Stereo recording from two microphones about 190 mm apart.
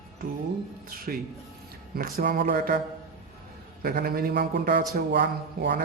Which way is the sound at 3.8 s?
50° right (ahead or behind).